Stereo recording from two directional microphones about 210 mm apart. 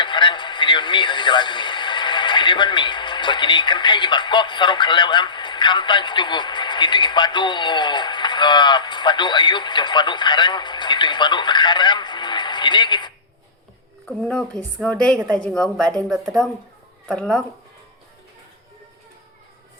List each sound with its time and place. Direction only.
0.0 s speech: 20° left (ahead or behind)
14.2 s a woman's voice: centre (ahead or behind)
17.1 s a woman's voice: 5° left (ahead or behind)